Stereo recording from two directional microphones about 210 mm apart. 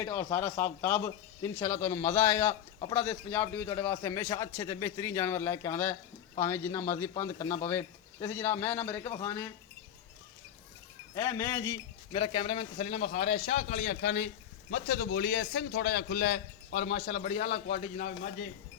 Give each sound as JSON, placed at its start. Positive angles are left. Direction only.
{"t": 0.0, "sound": "a man's voice", "side_deg": 10}
{"t": 11.1, "sound": "a man's voice", "side_deg": 15}
{"t": 17.4, "sound": "a man's voice", "side_deg": 50}
{"t": 17.7, "sound": "a man's voice", "side_deg": 40}